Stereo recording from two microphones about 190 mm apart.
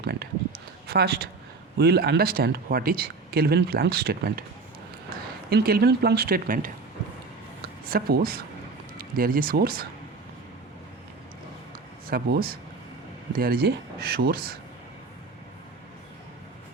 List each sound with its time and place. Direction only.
0.0 s speech: 55° right (ahead or behind)
5.5 s speech: 55° right (ahead or behind)
7.9 s speech: 50° right (ahead or behind)
12.0 s speech: 50° right (ahead or behind)